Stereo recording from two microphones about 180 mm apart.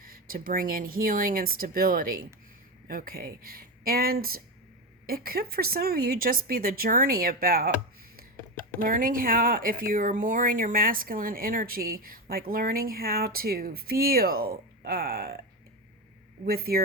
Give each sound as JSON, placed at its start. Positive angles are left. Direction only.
{"t": 0.0, "sound": "speech", "side_deg": -55}
{"t": 8.8, "sound": "speech", "side_deg": -50}
{"t": 16.5, "sound": "speech", "side_deg": -55}